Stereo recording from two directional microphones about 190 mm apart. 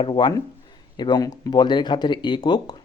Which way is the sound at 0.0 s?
25° left (ahead or behind).